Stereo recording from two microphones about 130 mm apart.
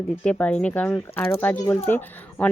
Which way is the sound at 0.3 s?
10° left (ahead or behind).